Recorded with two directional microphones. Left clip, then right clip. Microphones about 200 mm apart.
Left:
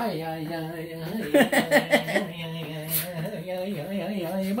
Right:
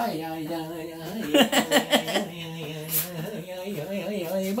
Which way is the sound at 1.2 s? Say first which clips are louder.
Even; centre (ahead or behind).